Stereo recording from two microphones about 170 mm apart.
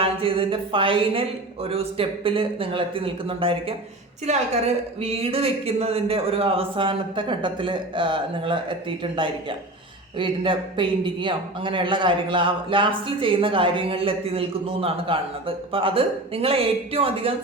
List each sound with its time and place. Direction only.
0.0 s a man's voice: 30° right (ahead or behind)
10.2 s a man's voice: 30° right (ahead or behind)